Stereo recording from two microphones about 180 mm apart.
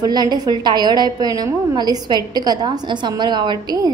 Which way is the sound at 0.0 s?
25° right (ahead or behind).